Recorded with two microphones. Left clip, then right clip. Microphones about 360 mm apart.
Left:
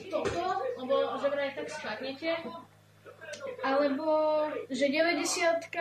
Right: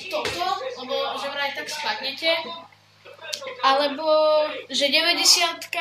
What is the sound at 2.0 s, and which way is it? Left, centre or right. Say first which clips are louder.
Speech: right 10 dB; right.